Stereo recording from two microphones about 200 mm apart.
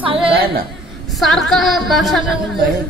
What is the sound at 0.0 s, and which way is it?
Chatter, 25° right (ahead or behind).